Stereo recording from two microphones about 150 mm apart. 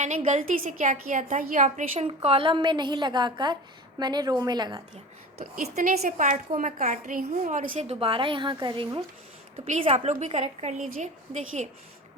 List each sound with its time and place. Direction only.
0.3 s a woman's voice: 55° right (ahead or behind)
2.0 s a woman's voice: 40° right (ahead or behind)
5.6 s a woman's voice: 50° right (ahead or behind)
7.9 s a woman's voice: 35° right (ahead or behind)
9.6 s a woman's voice: 45° right (ahead or behind)